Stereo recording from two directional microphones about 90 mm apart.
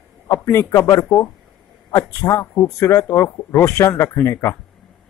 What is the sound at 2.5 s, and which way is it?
Speech, 25° left (ahead or behind).